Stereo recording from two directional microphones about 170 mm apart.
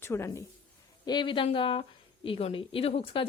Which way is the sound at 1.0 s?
25° left (ahead or behind).